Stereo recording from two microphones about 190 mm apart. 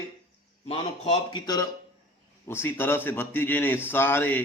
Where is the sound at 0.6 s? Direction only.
30° left (ahead or behind).